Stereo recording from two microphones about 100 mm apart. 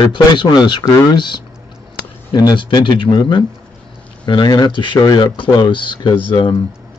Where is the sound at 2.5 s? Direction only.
50° left (ahead or behind).